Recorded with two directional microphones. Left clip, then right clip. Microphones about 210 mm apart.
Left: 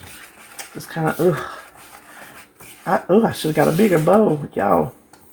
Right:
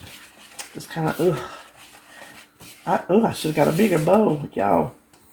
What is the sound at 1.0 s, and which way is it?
Speech, 20° left (ahead or behind).